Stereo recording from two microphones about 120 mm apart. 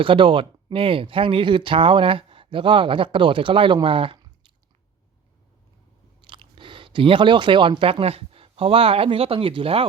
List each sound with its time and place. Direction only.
0.0 s speech: 45° right (ahead or behind)
6.2 s speech: 45° right (ahead or behind)